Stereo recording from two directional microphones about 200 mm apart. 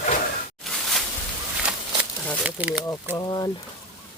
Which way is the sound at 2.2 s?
5° right (ahead or behind).